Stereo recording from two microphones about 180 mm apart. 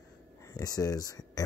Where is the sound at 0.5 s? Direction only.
20° left (ahead or behind).